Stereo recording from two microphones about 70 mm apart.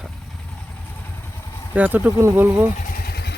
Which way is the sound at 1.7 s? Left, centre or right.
Right.